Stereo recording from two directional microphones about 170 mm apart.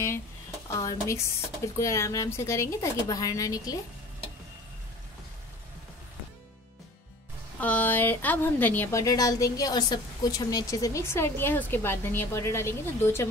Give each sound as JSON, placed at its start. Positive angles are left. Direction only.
{"t": 0.8, "sound": "a woman's voice", "side_deg": 15}
{"t": 7.6, "sound": "a woman's voice", "side_deg": 10}